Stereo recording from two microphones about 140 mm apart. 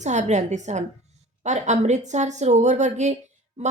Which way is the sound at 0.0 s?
55° right (ahead or behind).